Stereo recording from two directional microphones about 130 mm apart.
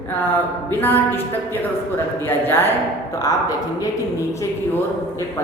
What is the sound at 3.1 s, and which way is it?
A woman's voice, 30° left (ahead or behind).